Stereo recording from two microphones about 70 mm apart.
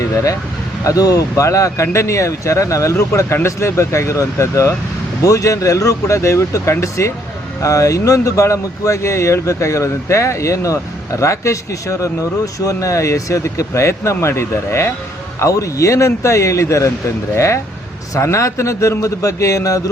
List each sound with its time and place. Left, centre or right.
0.9 s speech: left